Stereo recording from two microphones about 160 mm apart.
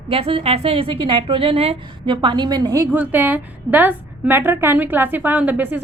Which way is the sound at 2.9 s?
10° right (ahead or behind).